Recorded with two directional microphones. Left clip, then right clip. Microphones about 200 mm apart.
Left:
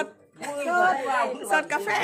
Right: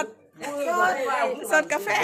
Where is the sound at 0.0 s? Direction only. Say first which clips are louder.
Right 1 dB; centre (ahead or behind).